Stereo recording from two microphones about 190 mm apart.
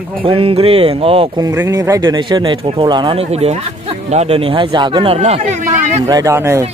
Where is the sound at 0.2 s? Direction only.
30° right (ahead or behind).